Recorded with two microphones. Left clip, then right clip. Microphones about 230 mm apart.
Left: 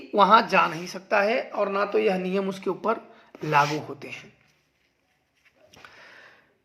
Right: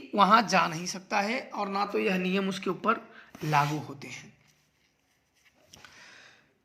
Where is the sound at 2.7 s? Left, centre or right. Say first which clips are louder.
Even; right.